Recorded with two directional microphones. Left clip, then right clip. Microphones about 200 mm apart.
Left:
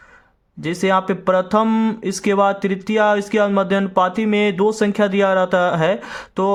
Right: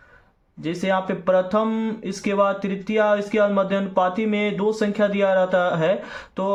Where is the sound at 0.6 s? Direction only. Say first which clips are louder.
Left 5 dB; 45° left (ahead or behind).